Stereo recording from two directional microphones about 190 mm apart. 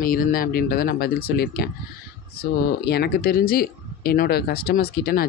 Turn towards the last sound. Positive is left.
turn(degrees=55)  # may be behind; listen again after turning